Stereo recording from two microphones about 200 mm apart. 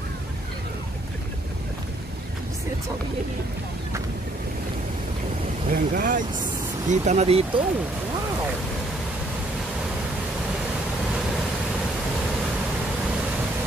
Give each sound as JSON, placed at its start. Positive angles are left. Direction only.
{"t": 5.7, "sound": "speech", "side_deg": -45}